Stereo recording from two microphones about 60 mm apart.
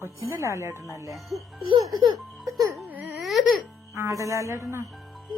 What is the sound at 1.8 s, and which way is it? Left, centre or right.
Speech, right.